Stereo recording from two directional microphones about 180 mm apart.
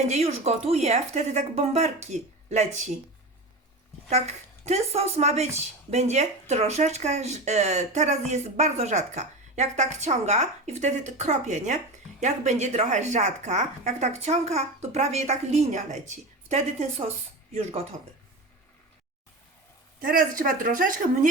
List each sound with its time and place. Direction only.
0.1 s speech: 40° right (ahead or behind)
4.1 s speech: 40° right (ahead or behind)
20.0 s speech: 50° right (ahead or behind)